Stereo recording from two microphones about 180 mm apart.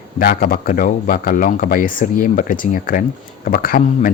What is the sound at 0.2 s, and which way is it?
Speech, 55° left (ahead or behind).